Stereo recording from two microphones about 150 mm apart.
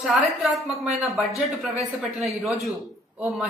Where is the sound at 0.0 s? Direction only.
Centre (ahead or behind).